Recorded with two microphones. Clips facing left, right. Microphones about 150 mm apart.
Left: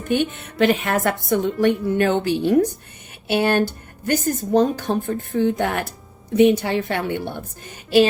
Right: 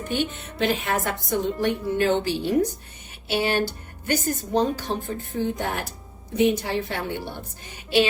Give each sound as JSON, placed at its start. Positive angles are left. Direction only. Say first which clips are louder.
{"t": 0.1, "sound": "a woman's voice", "louder": "left 7 dB", "side_deg": 55}